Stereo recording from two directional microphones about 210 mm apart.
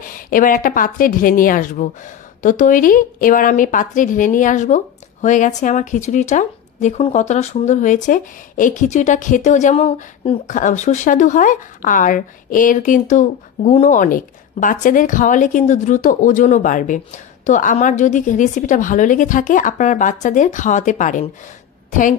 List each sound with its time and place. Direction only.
0.1 s speech: 40° left (ahead or behind)